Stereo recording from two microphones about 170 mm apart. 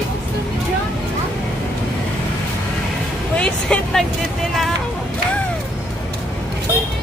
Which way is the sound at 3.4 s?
5° left (ahead or behind).